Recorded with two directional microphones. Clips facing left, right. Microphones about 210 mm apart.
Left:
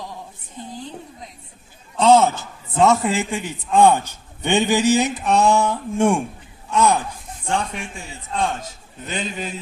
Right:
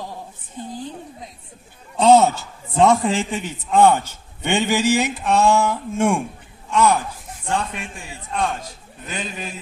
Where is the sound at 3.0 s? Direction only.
10° left (ahead or behind).